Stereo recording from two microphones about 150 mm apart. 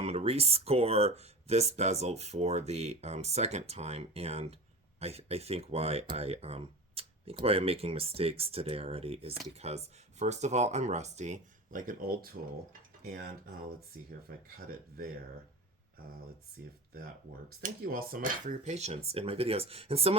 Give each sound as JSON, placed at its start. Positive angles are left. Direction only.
{"t": 0.0, "sound": "speech", "side_deg": -45}
{"t": 17.6, "sound": "speech", "side_deg": -75}
{"t": 18.6, "sound": "speech", "side_deg": -45}